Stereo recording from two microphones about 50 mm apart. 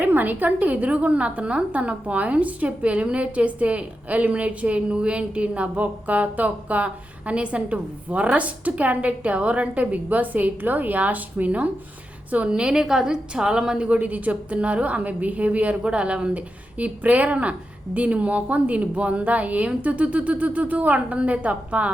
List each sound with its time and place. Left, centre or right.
0.0 s a woman's voice: right
12.5 s a woman's voice: centre